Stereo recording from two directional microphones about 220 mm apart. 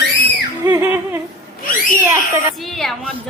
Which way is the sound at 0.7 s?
10° right (ahead or behind).